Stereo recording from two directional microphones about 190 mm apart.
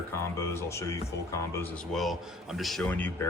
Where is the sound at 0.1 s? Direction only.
15° left (ahead or behind).